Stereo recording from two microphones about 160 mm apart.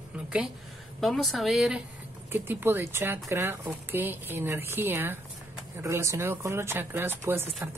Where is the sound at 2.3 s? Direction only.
15° right (ahead or behind).